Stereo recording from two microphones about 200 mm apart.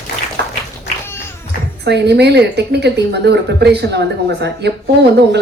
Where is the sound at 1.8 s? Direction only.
55° right (ahead or behind).